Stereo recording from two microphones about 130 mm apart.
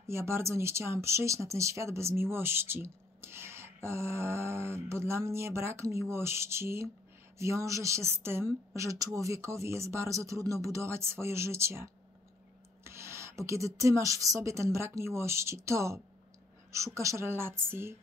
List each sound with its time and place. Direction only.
0.0 s speech: 20° right (ahead or behind)